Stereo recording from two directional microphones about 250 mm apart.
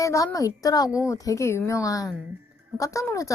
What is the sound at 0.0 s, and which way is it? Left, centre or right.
Speech, centre.